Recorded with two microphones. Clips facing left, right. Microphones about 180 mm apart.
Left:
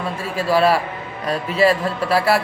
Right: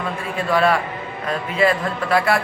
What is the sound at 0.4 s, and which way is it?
Speech, 30° left (ahead or behind).